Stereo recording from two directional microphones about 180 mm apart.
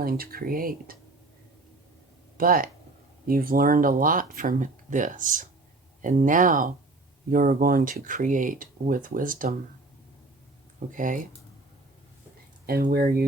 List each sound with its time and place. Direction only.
0.0 s speech: 55° right (ahead or behind)
2.4 s speech: 50° right (ahead or behind)
10.9 s speech: 45° right (ahead or behind)
12.6 s speech: 55° right (ahead or behind)